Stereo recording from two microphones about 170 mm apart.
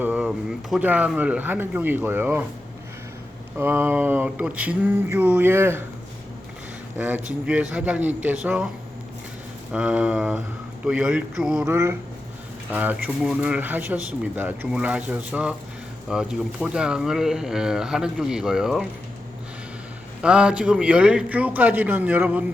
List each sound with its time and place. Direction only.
0.0 s speech: 5° right (ahead or behind)
3.6 s speech: 15° right (ahead or behind)
6.9 s speech: 10° right (ahead or behind)
9.7 s speech: 5° right (ahead or behind)
11.6 s speech: 15° right (ahead or behind)
20.2 s speech: 5° right (ahead or behind)